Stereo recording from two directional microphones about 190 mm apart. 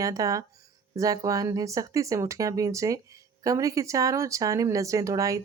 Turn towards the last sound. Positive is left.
turn(degrees=-15)  # may be behind; listen again after turning